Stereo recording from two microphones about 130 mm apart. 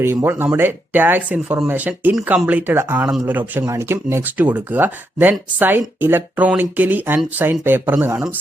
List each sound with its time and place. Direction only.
0.0 s speech: 20° right (ahead or behind)